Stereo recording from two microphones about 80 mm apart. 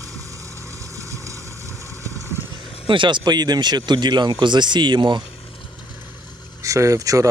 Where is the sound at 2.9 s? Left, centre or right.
Right.